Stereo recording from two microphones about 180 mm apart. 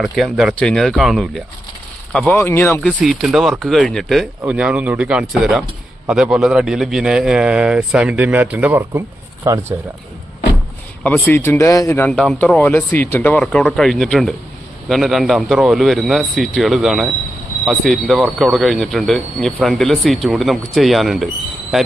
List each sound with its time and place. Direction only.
0.0 s speech: centre (ahead or behind)
2.1 s speech: 10° left (ahead or behind)
3.0 s speech: centre (ahead or behind)
11.0 s speech: 10° left (ahead or behind)